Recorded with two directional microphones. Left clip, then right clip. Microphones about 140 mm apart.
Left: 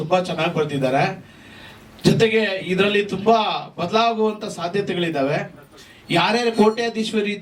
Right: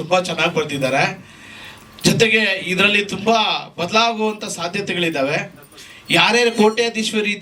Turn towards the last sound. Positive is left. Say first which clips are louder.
# right 3 dB
turn(degrees=-10)  # may be behind; listen again after turning